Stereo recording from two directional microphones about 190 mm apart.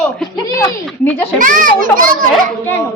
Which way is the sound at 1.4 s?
45° right (ahead or behind).